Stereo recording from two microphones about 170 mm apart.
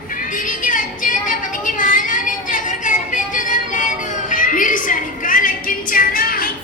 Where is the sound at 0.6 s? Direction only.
50° left (ahead or behind).